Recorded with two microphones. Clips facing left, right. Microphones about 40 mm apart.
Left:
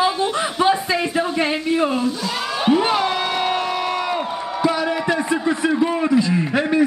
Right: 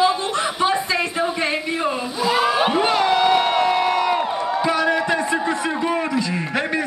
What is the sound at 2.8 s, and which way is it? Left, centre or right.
Crowd, centre.